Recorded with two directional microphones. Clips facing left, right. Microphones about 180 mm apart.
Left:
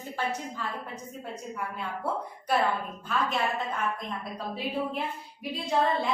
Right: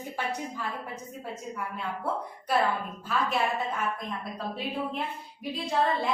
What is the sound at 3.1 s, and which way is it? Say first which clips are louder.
Speech: even; centre (ahead or behind).